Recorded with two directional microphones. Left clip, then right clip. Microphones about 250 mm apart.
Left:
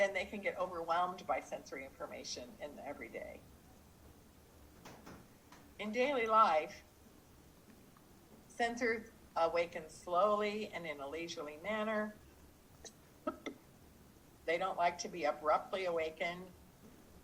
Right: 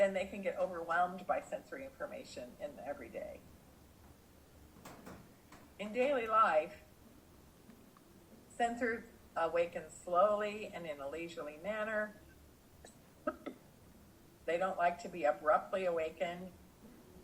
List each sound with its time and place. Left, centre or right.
0.0 s speech: left
5.7 s speech: left
8.5 s speech: left
14.4 s speech: left